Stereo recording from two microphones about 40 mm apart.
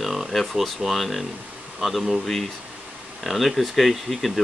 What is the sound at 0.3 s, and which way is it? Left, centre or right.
Speech, centre.